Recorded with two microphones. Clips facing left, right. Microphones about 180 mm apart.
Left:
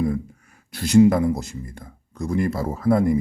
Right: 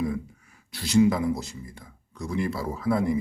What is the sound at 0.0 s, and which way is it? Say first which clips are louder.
Speech: left 5 dB; 45° left (ahead or behind).